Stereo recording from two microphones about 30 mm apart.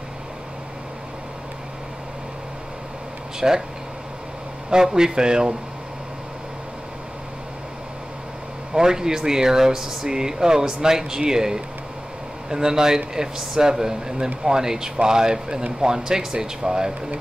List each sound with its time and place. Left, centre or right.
3.3 s speech: right
4.9 s speech: right
8.7 s speech: right